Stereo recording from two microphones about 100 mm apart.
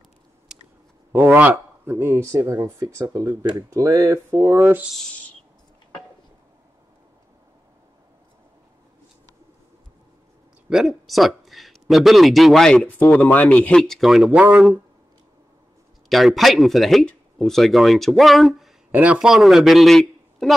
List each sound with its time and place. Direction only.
0.5 s chewing: 5° right (ahead or behind)
1.1 s speech: 20° right (ahead or behind)
10.7 s a man's voice: centre (ahead or behind)
16.1 s speech: centre (ahead or behind)
18.9 s a man's voice: 15° right (ahead or behind); by 20.5 s 5° left (ahead or behind)